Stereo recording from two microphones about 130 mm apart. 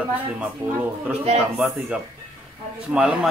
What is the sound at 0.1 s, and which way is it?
Speech, 10° right (ahead or behind).